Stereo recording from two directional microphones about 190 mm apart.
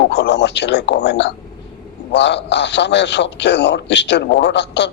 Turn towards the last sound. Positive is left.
turn(degrees=65)  # may be behind; listen again after turning